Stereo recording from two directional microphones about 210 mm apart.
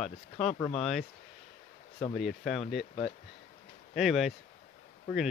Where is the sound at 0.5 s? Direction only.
20° left (ahead or behind).